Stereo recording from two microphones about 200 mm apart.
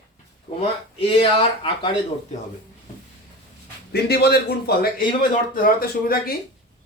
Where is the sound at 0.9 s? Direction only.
25° left (ahead or behind).